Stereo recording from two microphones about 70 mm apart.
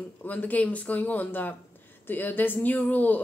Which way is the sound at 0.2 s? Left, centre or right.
Left.